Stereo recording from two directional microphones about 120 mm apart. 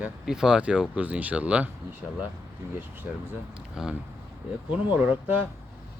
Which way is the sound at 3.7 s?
5° right (ahead or behind).